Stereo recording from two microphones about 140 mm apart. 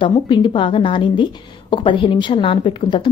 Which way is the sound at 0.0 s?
35° left (ahead or behind).